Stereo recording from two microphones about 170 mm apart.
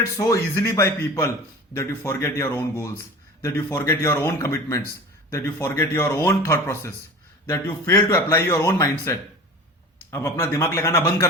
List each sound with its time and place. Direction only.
0.0 s a man's voice: 15° left (ahead or behind)